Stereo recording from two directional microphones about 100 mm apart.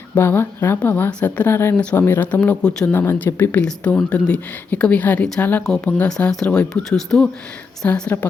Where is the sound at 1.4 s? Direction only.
25° left (ahead or behind); by 7.3 s 5° left (ahead or behind).